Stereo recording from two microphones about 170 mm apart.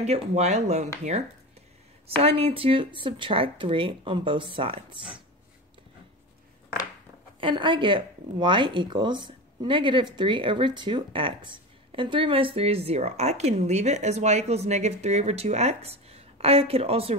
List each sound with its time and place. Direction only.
0.0 s speech: 40° right (ahead or behind)
2.0 s speech: 35° right (ahead or behind)
7.3 s speech: 30° right (ahead or behind)